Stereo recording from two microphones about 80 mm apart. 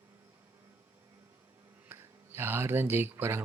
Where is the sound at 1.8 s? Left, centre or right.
Right.